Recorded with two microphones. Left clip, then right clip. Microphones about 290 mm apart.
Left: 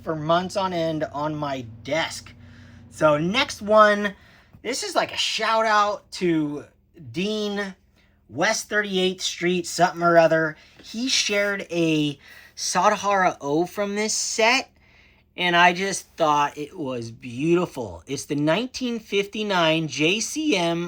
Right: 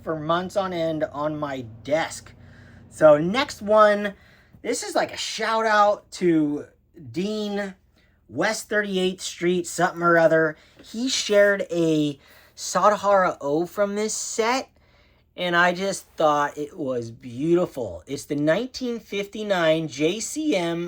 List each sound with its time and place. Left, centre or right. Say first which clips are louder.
0.0 s speech: left 2 dB; centre